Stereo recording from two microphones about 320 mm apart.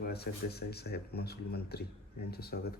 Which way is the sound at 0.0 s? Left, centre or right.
Left.